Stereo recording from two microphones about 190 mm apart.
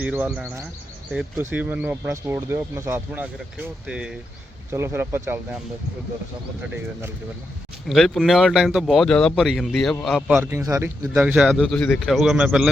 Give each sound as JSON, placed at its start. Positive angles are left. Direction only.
{"t": 0.0, "sound": "speech", "side_deg": -5}
{"t": 7.9, "sound": "speech", "side_deg": 0}
{"t": 10.5, "sound": "speech", "side_deg": -15}